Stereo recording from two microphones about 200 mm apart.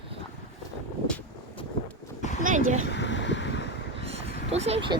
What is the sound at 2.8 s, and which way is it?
Wind, 60° left (ahead or behind).